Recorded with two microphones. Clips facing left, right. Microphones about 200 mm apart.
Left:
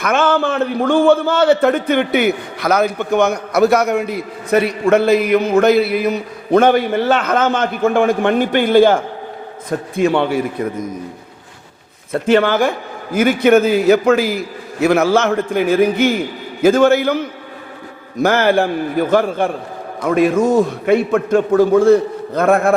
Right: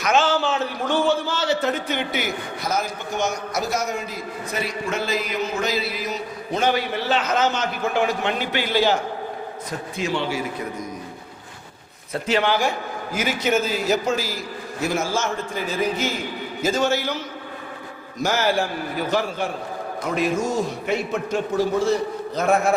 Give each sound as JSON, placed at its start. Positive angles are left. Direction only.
{"t": 0.0, "sound": "a man's voice", "side_deg": 55}
{"t": 12.1, "sound": "a man's voice", "side_deg": 50}